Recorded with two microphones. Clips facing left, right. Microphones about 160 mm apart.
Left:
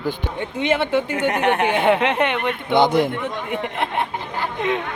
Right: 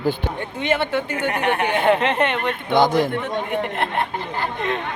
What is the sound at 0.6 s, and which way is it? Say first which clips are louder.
Speech: left 2 dB; 20° left (ahead or behind).